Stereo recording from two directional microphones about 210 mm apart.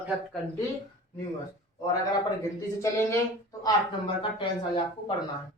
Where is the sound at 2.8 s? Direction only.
15° left (ahead or behind).